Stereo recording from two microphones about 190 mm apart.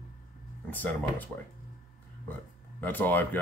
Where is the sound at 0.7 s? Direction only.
10° left (ahead or behind).